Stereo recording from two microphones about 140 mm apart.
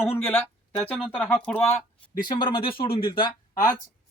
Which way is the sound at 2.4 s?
35° left (ahead or behind).